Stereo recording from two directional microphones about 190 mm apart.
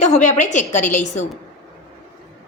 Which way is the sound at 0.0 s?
40° left (ahead or behind).